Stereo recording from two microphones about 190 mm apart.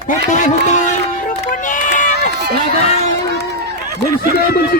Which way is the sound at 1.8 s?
40° left (ahead or behind).